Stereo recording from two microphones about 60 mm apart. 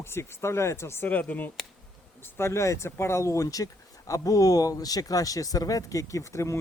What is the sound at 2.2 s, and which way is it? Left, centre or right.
Speech, left.